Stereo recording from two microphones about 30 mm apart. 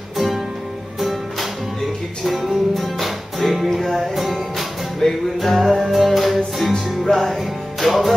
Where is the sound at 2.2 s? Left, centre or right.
Centre.